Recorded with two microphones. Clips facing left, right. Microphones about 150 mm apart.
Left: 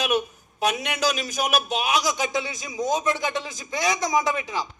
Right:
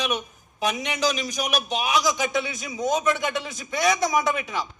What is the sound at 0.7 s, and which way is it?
Speech, 50° left (ahead or behind).